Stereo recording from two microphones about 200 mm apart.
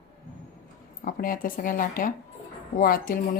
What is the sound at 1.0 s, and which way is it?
A woman's voice, 45° left (ahead or behind).